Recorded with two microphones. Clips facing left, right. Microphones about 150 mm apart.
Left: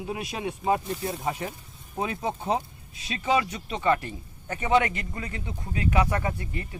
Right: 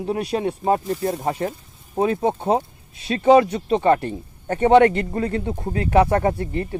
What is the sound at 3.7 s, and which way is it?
Speech, 50° right (ahead or behind).